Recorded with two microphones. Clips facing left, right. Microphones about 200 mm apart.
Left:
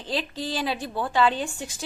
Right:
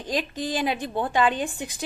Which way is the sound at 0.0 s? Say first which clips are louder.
Right 2 dB; 15° right (ahead or behind).